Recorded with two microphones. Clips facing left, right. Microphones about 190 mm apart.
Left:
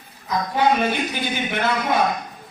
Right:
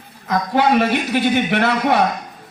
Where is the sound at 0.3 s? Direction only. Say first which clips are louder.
Right 3 dB; 70° right (ahead or behind).